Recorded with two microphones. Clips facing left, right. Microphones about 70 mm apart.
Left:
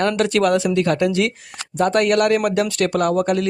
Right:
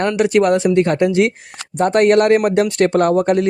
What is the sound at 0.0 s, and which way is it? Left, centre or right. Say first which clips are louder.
Speech: right 3 dB; right.